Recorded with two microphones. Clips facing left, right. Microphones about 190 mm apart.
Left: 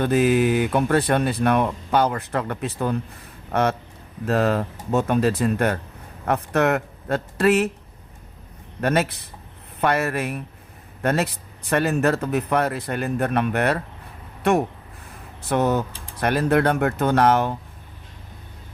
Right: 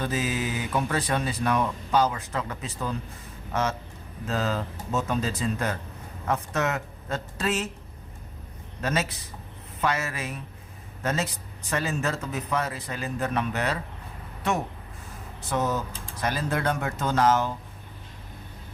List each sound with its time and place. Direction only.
0.0 s speech: 60° left (ahead or behind)
8.8 s speech: 60° left (ahead or behind)
15.4 s speech: 65° left (ahead or behind)